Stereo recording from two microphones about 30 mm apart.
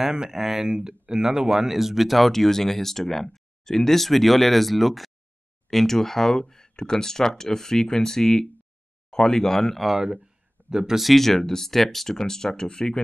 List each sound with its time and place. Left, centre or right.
0.0 s speech: right
0.3 s speech: centre
0.8 s speech: right; by 9.8 s centre
9.9 s speech: centre
11.1 s speech: centre